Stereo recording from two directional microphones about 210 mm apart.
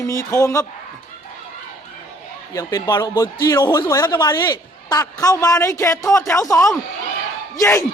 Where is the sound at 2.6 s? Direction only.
15° left (ahead or behind).